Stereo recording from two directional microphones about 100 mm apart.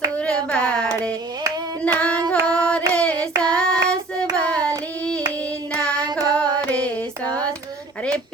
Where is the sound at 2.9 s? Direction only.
15° left (ahead or behind).